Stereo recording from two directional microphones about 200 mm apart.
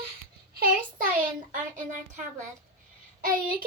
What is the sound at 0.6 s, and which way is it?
Speech, 45° right (ahead or behind).